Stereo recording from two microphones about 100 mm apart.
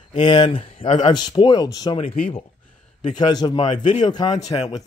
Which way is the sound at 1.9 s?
65° left (ahead or behind).